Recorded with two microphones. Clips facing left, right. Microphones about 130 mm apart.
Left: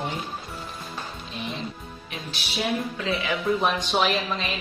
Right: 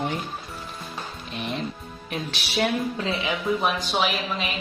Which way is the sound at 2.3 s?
90° right.